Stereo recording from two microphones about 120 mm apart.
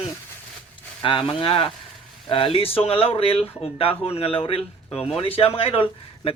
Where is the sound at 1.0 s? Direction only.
45° left (ahead or behind).